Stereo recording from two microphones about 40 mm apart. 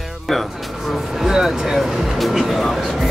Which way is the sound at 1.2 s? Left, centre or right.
Centre.